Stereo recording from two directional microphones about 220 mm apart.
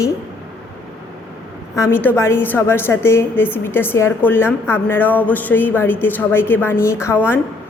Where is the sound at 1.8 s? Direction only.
10° left (ahead or behind).